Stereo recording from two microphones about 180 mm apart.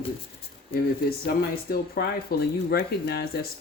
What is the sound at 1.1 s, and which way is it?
Speech, 55° left (ahead or behind).